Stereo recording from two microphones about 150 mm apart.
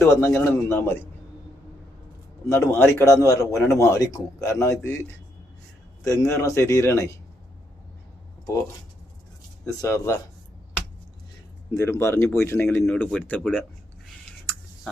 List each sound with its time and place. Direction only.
0.0 s a man's voice: 15° left (ahead or behind)
2.5 s speech: 15° left (ahead or behind)
6.1 s speech: 20° left (ahead or behind)
9.8 s speech: 20° left (ahead or behind)
11.8 s a man's voice: 20° left (ahead or behind)